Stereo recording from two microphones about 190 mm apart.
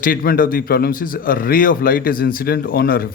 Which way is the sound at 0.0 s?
50° left (ahead or behind).